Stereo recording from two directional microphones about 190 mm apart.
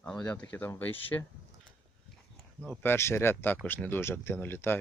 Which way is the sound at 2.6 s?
10° left (ahead or behind).